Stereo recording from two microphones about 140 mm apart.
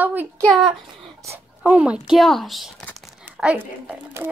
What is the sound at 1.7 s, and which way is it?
Speech, 5° right (ahead or behind).